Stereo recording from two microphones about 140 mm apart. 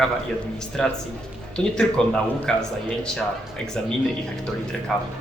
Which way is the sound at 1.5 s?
5° left (ahead or behind).